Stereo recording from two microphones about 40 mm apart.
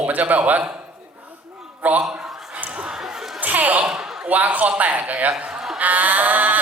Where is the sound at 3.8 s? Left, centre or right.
Right.